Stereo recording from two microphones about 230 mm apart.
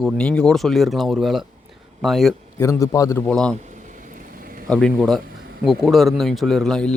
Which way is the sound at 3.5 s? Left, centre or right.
Right.